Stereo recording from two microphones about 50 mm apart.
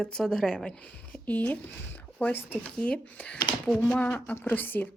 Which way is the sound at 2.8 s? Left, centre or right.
Left.